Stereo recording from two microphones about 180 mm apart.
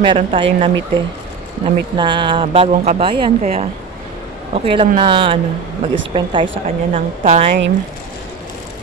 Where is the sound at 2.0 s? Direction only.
25° right (ahead or behind).